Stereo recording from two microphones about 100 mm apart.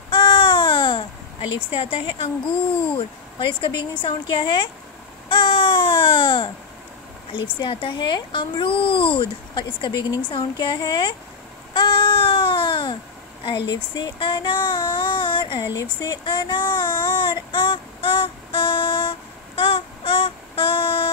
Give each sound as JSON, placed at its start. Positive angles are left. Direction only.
{"t": 0.1, "sound": "baby cry", "side_deg": 55}
{"t": 1.8, "sound": "speech", "side_deg": 65}
{"t": 5.3, "sound": "baby cry", "side_deg": 55}
{"t": 7.6, "sound": "a child's voice", "side_deg": 60}
{"t": 11.7, "sound": "baby cry", "side_deg": 50}
{"t": 13.4, "sound": "child singing", "side_deg": 50}
{"t": 15.7, "sound": "speech", "side_deg": 35}
{"t": 16.3, "sound": "child singing", "side_deg": 50}